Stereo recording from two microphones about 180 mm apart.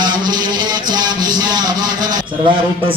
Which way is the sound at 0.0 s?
25° right (ahead or behind).